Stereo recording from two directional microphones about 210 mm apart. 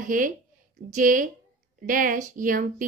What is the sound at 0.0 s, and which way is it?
A woman's voice, 40° right (ahead or behind).